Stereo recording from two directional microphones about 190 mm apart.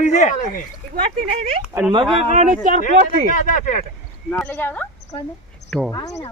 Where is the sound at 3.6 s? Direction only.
45° left (ahead or behind).